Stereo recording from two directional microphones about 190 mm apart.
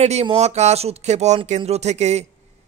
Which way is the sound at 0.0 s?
35° right (ahead or behind).